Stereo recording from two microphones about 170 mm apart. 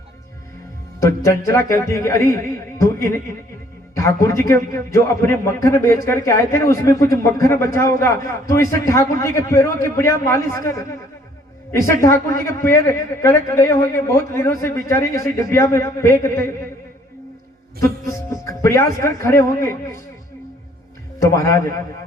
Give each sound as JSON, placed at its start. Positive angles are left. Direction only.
{"t": 0.9, "sound": "a man's voice", "side_deg": 20}
{"t": 2.7, "sound": "a sound", "side_deg": 15}
{"t": 3.9, "sound": "a man's voice", "side_deg": 20}
{"t": 17.7, "sound": "a man's voice", "side_deg": 20}
{"t": 21.2, "sound": "a man's voice", "side_deg": 20}